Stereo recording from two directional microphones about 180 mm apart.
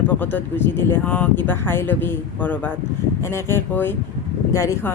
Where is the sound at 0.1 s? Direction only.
10° left (ahead or behind).